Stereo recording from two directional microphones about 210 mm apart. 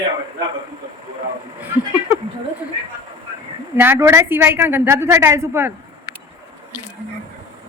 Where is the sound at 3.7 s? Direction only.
10° right (ahead or behind).